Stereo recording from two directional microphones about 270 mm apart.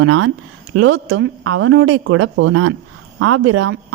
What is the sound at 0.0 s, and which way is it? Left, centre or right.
A woman's voice, right.